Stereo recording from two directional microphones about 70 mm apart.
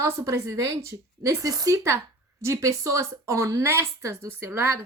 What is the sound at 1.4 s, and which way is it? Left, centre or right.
Speech, right.